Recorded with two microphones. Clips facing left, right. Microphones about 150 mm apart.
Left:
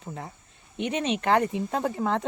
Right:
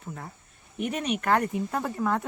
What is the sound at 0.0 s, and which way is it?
A woman's voice, 30° left (ahead or behind).